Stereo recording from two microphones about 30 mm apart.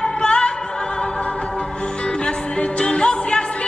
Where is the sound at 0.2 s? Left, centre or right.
Left.